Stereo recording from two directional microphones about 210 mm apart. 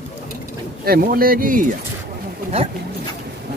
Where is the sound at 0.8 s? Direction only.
45° right (ahead or behind).